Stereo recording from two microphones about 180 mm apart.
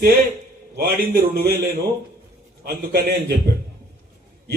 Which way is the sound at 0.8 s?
55° right (ahead or behind).